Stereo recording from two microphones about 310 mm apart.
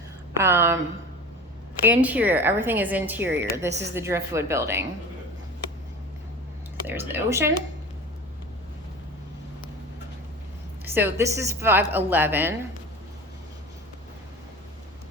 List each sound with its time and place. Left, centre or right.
0.3 s a woman's voice: centre
1.8 s a woman's voice: centre
6.8 s a woman's voice: centre
10.8 s a woman's voice: centre